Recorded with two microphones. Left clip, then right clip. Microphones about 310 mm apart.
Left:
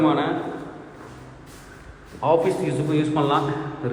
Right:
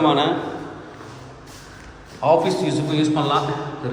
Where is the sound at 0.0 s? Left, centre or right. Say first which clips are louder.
Right 3 dB; centre.